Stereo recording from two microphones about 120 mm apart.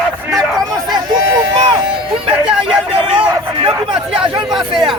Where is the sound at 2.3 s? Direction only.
5° right (ahead or behind).